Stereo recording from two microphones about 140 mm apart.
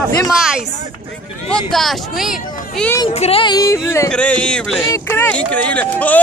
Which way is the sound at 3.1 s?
45° left (ahead or behind).